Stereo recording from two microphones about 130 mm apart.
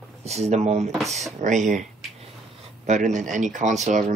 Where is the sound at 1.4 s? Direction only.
70° right (ahead or behind).